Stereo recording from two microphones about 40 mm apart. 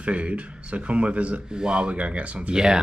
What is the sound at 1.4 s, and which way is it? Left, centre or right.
Speech, right.